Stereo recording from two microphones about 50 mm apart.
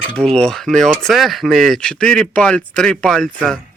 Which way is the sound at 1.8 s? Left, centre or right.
Centre.